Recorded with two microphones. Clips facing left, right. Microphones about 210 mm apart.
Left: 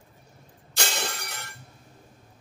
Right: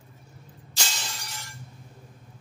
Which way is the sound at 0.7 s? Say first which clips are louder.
Left 6 dB; 60° left (ahead or behind).